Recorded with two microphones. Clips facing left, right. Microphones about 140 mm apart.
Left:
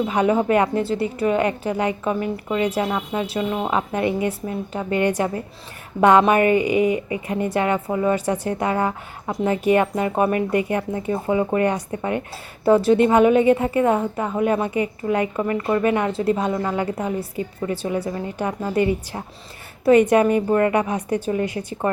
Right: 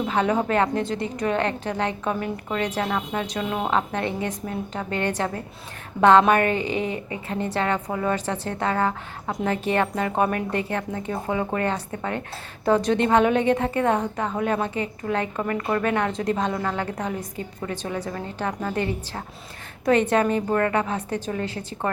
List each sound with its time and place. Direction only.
0.1 s a woman's voice: 10° left (ahead or behind)